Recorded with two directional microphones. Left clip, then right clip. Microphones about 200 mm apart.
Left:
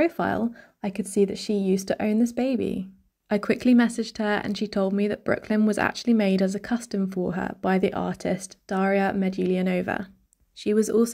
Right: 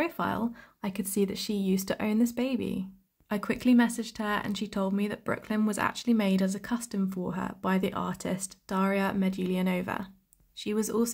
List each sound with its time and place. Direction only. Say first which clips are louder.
0.0 s speech: left 6 dB; 20° left (ahead or behind)